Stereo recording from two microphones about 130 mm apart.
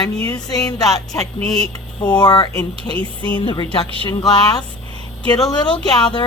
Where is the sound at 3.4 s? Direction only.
40° left (ahead or behind).